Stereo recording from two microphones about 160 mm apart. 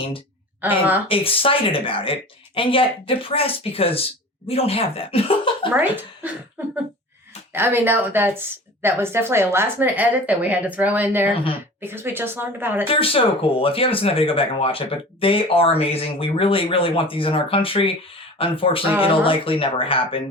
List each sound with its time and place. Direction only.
0.6 s a woman's voice: 10° right (ahead or behind)
1.0 s speech: 35° left (ahead or behind)
5.7 s a woman's voice: 10° right (ahead or behind)
7.5 s a woman's voice: 15° right (ahead or behind)
12.9 s speech: 35° left (ahead or behind)